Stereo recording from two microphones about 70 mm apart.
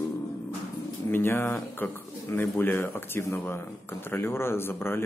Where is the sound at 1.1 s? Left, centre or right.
Left.